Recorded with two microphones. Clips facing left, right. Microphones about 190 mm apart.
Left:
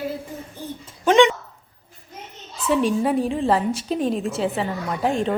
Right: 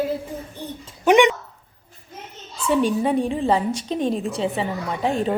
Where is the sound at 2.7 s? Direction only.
Centre (ahead or behind).